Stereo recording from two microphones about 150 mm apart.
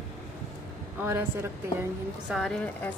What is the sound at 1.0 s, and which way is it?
Speech, 15° right (ahead or behind).